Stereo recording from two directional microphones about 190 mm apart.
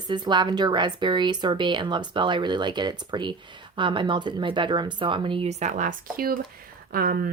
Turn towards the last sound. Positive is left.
turn(degrees=-50)  # may be behind; listen again after turning